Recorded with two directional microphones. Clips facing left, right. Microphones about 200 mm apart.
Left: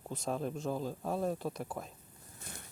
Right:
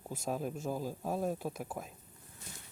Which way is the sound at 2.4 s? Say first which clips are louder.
Left 3 dB; 55° left (ahead or behind).